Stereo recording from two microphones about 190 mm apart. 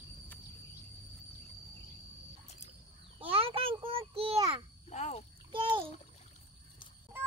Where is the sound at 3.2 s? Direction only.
30° right (ahead or behind).